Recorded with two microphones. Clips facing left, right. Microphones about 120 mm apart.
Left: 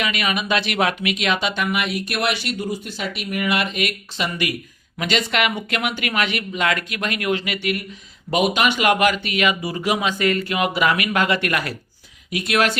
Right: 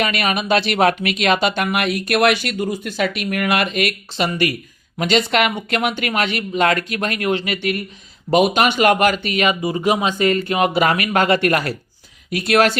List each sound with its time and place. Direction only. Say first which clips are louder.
0.0 s speech: right 3 dB; 45° right (ahead or behind)
4.9 s speech: right 4 dB; 35° right (ahead or behind)
9.6 s speech: right 4 dB; 25° right (ahead or behind)